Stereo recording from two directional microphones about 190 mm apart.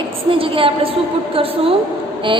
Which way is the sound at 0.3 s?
30° right (ahead or behind).